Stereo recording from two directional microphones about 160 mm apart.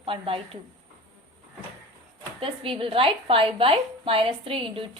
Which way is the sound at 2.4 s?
35° right (ahead or behind).